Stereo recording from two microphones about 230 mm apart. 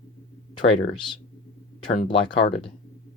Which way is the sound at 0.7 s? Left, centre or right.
Left.